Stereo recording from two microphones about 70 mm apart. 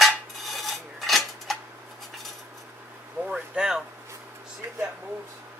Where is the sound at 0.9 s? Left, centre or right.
Centre.